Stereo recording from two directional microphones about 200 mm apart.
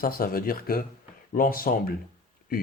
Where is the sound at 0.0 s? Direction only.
45° left (ahead or behind).